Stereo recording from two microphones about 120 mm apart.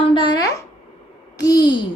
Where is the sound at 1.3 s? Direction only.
30° left (ahead or behind).